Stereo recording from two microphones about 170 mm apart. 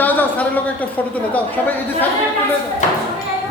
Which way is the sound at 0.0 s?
10° left (ahead or behind).